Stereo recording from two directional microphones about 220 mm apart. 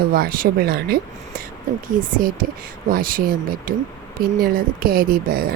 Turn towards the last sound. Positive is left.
turn(degrees=-40)  # may be behind; listen again after turning